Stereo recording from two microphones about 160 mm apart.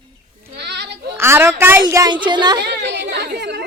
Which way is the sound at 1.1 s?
15° right (ahead or behind).